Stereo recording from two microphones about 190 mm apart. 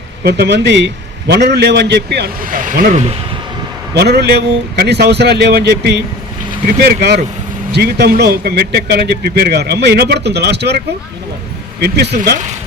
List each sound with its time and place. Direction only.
0.3 s a man's voice: 60° right (ahead or behind); by 3.2 s 35° right (ahead or behind)
3.9 s a man's voice: 60° right (ahead or behind)
11.8 s a man's voice: 60° right (ahead or behind)